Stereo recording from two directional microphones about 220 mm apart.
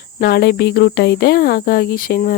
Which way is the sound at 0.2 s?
45° left (ahead or behind).